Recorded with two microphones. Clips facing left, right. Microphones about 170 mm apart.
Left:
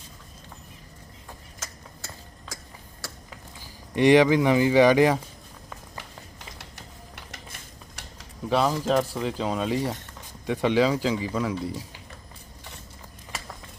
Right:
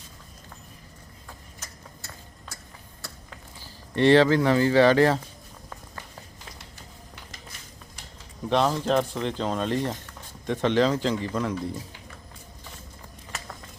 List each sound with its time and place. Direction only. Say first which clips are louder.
1.5 s a sound: left 2 dB; 90° left
3.2 s speech: left 1 dB; 15° left (ahead or behind)
8.4 s speech: even; 5° left (ahead or behind)